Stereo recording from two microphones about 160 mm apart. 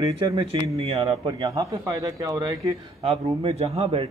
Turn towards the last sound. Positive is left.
turn(degrees=-40)  # may be behind; listen again after turning